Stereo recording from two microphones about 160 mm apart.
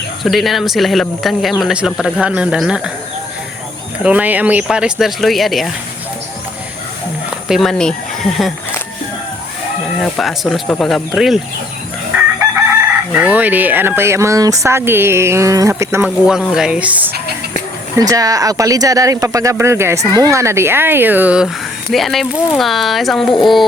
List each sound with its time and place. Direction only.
0.2 s speech: centre (ahead or behind)
4.0 s speech: 10° right (ahead or behind)
7.3 s speech: 5° right (ahead or behind)
10.0 s speech: centre (ahead or behind)
13.1 s speech: 10° right (ahead or behind)
17.9 s speech: 20° right (ahead or behind); by 23.6 s centre (ahead or behind)